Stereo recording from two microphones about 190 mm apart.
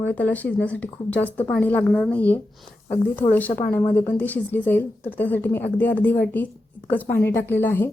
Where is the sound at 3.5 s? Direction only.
50° left (ahead or behind).